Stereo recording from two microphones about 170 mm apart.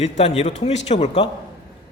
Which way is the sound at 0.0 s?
40° left (ahead or behind).